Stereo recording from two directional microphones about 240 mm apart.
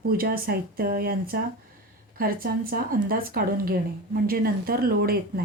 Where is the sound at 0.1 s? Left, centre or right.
Right.